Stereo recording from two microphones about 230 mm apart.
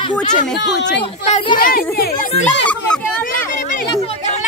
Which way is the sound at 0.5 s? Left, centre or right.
Left.